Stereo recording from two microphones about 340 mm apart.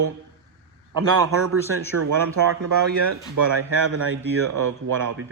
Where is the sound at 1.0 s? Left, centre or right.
Right.